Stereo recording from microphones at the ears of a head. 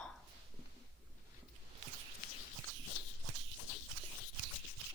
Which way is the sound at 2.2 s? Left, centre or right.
Left.